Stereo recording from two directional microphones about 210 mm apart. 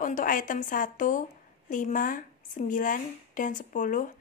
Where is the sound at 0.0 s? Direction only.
40° left (ahead or behind).